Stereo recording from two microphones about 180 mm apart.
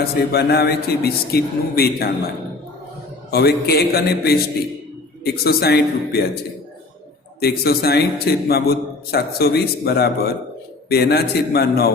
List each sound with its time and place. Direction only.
0.3 s a man's voice: 65° left (ahead or behind)
3.3 s a man's voice: 60° left (ahead or behind)
7.3 s a man's voice: 60° left (ahead or behind)